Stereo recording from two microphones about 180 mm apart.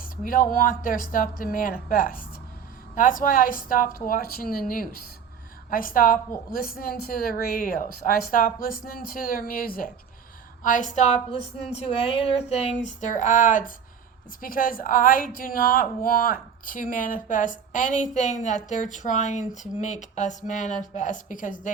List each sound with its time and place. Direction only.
0.0 s a woman's voice: 55° left (ahead or behind)
11.3 s a woman's voice: 35° left (ahead or behind)